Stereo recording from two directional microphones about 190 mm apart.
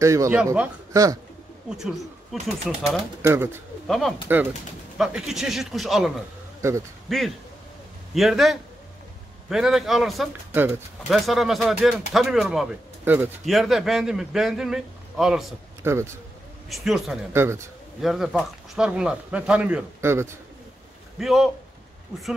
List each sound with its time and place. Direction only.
0.0 s a man's voice: 15° right (ahead or behind)
1.7 s a man's voice: 5° right (ahead or behind)
3.2 s a man's voice: 15° right (ahead or behind)
3.8 s speech: centre (ahead or behind)
4.3 s a man's voice: 10° right (ahead or behind)
6.6 s a man's voice: 15° right (ahead or behind)
7.1 s a man's voice: centre (ahead or behind)
10.5 s a man's voice: 10° right (ahead or behind)
15.8 s a man's voice: 15° right (ahead or behind)
16.6 s a man's voice: centre (ahead or behind)
17.3 s a man's voice: 15° right (ahead or behind)
18.0 s a man's voice: centre (ahead or behind)
21.2 s a man's voice: centre (ahead or behind)